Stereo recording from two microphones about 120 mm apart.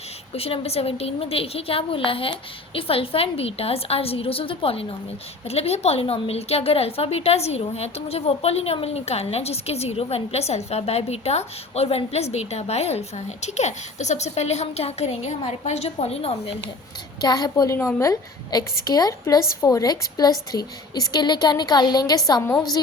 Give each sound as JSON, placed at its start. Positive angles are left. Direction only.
{"t": 0.3, "sound": "a woman's voice", "side_deg": 55}
{"t": 17.2, "sound": "a woman's voice", "side_deg": 35}